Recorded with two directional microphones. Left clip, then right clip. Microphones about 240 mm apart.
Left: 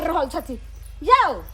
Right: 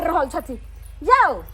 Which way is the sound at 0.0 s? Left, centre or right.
Centre.